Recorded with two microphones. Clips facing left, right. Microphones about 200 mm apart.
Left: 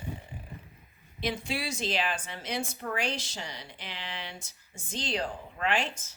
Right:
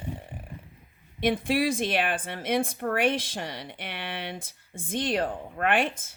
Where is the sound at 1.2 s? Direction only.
50° right (ahead or behind).